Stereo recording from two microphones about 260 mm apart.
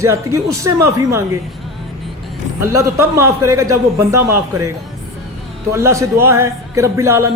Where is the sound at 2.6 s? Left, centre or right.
Centre.